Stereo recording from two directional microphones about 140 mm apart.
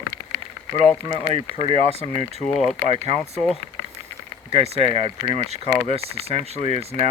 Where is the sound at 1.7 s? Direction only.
45° right (ahead or behind).